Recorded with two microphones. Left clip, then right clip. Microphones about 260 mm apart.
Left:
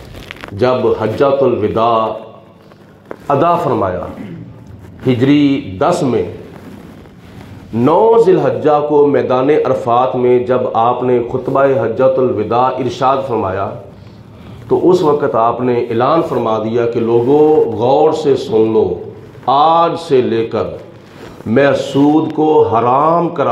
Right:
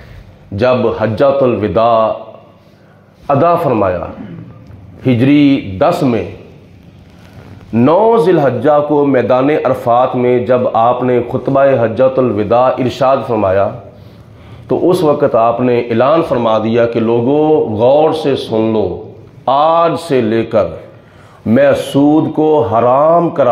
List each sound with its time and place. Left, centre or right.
0.6 s a man's voice: right
3.3 s a man's voice: right
7.7 s a man's voice: right
14.7 s a man's voice: right